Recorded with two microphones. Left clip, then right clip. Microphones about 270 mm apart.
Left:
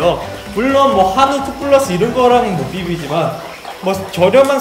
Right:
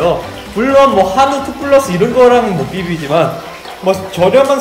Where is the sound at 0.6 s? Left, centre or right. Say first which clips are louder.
Right 3 dB; centre.